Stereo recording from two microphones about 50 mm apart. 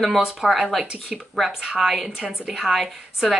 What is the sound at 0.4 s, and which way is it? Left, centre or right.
Speech, centre.